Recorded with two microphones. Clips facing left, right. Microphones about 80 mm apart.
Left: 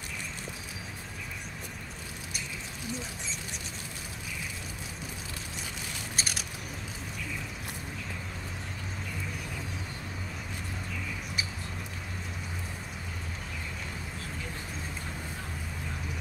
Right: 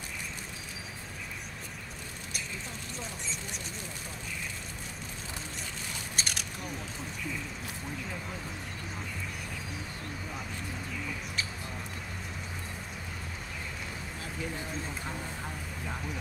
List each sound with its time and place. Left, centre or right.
6.1 s scissors: centre